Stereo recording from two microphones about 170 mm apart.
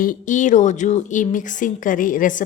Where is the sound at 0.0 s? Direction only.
50° left (ahead or behind).